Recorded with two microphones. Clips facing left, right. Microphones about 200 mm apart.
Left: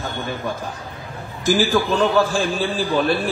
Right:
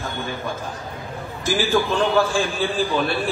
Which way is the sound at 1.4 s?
40° left (ahead or behind).